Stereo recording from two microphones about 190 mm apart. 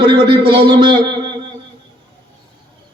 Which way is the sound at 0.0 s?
25° right (ahead or behind).